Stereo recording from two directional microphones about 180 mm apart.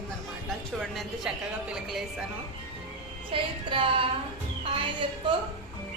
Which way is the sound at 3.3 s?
30° right (ahead or behind).